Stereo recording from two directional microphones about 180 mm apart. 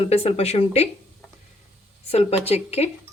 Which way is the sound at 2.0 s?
35° left (ahead or behind).